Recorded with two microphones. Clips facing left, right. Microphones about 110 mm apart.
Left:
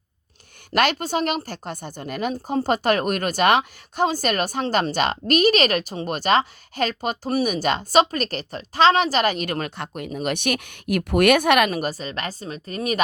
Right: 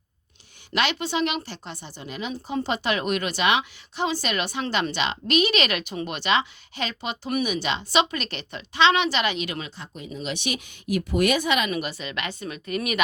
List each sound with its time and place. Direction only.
0.7 s speech: 45° left (ahead or behind)
11.7 s a woman's voice: 40° left (ahead or behind)